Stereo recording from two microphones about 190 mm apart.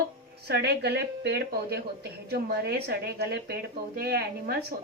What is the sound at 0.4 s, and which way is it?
A woman's voice, 60° right (ahead or behind).